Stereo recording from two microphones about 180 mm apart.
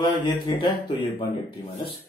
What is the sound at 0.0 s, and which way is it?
Speech, 25° left (ahead or behind).